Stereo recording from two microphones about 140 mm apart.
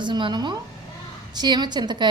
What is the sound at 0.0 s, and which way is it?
A woman's voice, 35° right (ahead or behind).